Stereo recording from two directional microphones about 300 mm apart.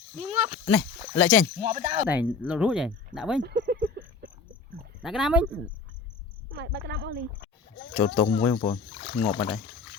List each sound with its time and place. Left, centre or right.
0.2 s speech: right
0.6 s speech: centre
1.7 s speech: right
2.0 s cricket: centre
3.4 s a sound: right
5.0 s cricket: centre
6.5 s speech: right
7.9 s speech: centre